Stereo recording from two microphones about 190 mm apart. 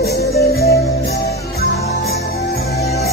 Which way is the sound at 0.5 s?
55° left (ahead or behind).